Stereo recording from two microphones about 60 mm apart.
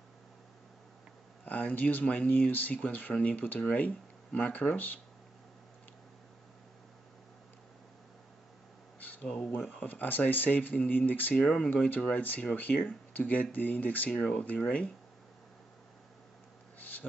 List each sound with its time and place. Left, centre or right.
1.4 s speech: left
9.0 s a sound: left
9.8 s speech: left
11.4 s speech: centre
11.7 s speech: left
16.7 s a sound: left